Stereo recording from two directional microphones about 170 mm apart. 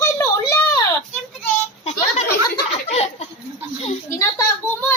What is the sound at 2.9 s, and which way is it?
Speech, 35° left (ahead or behind).